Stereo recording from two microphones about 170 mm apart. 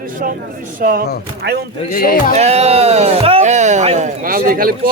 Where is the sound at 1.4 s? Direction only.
85° right.